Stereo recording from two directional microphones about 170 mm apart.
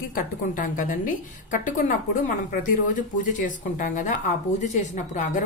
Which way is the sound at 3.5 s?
50° left (ahead or behind).